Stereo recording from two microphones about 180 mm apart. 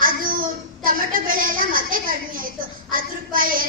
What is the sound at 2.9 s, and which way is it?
Speech, 50° right (ahead or behind).